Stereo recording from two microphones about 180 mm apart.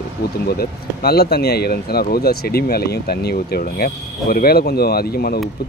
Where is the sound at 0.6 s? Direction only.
60° left (ahead or behind).